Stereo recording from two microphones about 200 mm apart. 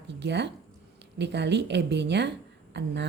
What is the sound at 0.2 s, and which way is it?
A woman's voice, 60° right (ahead or behind).